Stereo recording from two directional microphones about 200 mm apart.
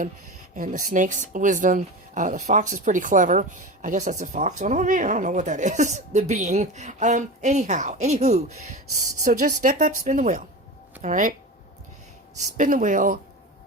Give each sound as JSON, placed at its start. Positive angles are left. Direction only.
{"t": 0.5, "sound": "speech", "side_deg": -40}
{"t": 12.4, "sound": "speech", "side_deg": -40}